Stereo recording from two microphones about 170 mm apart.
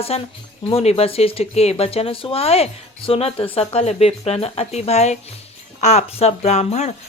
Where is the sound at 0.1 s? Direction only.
40° left (ahead or behind).